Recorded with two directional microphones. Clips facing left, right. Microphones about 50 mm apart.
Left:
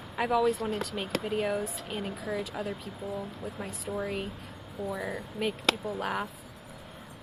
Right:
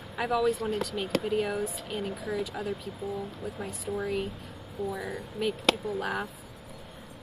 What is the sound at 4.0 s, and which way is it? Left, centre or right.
Speech, centre.